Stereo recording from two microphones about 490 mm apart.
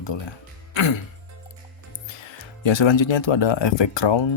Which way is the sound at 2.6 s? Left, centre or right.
Left.